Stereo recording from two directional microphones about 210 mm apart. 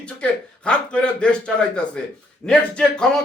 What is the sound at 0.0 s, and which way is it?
A man's voice, 5° left (ahead or behind).